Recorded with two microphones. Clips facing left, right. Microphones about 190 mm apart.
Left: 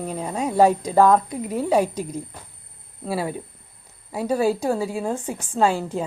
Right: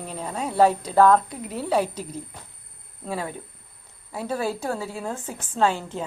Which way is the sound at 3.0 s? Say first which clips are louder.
Left 4 dB; 10° left (ahead or behind).